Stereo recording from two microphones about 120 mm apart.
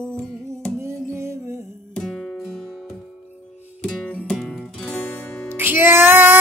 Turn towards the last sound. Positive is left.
turn(degrees=-15)  # may be behind; listen again after turning